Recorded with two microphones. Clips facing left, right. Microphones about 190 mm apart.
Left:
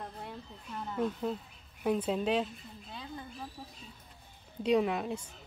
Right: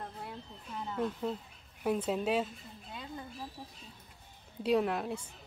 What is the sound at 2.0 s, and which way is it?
Speech, 5° right (ahead or behind).